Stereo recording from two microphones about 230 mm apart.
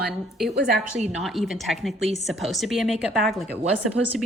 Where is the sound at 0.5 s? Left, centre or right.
Right.